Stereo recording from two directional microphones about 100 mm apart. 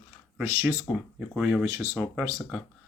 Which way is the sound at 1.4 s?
5° right (ahead or behind).